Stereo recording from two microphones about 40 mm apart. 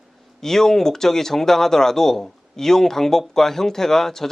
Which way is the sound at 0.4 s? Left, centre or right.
Centre.